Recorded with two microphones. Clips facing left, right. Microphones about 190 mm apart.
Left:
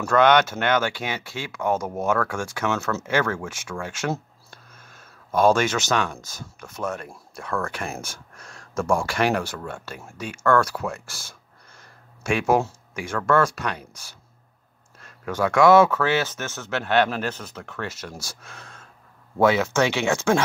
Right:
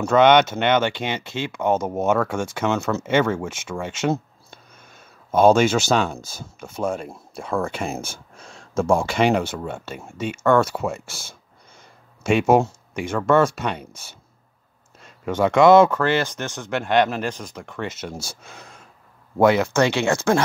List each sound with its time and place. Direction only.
0.0 s speech: 20° right (ahead or behind)
5.3 s speech: 25° right (ahead or behind)
15.2 s speech: 20° right (ahead or behind)